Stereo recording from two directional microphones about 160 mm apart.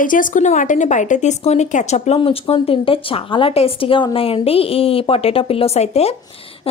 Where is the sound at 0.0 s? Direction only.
55° left (ahead or behind).